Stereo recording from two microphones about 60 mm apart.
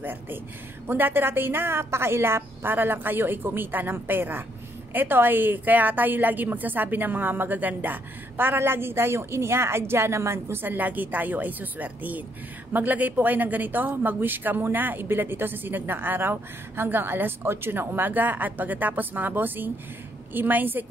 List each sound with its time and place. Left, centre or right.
0.0 s a woman's voice: right